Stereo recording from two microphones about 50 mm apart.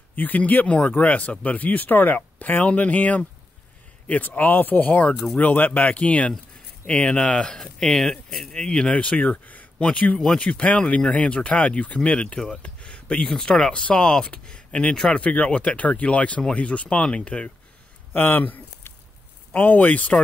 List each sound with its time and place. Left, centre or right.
0.1 s speech: left
4.4 s speech: left
10.1 s speech: centre
10.4 s speech: left
12.6 s a sound: left
13.3 s speech: centre
18.1 s speech: left